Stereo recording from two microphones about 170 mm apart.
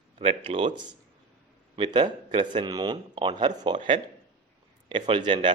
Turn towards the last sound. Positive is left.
turn(degrees=-30)  # may be behind; listen again after turning